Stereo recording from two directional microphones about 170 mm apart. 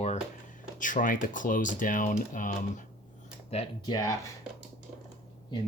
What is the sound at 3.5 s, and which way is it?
Speech, 30° left (ahead or behind).